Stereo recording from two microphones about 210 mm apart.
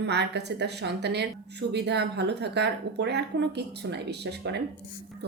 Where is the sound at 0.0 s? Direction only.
55° right (ahead or behind).